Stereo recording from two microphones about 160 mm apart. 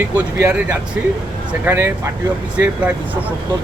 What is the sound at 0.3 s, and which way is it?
Speech, 15° right (ahead or behind).